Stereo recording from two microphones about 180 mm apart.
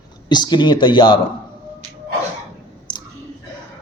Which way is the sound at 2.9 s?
25° left (ahead or behind).